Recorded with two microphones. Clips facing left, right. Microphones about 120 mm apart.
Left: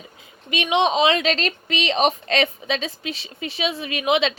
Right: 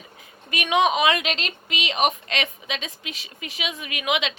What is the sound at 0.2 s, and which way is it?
A woman's voice, 25° left (ahead or behind).